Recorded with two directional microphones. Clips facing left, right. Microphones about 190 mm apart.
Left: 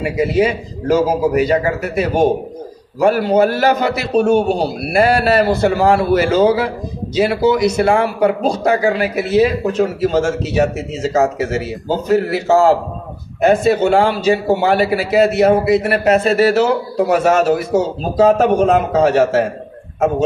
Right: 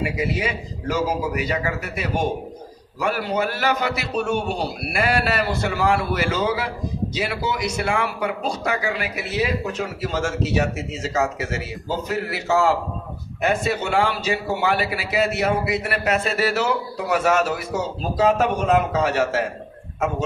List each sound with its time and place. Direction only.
0.4 s a man's voice: 40° left (ahead or behind)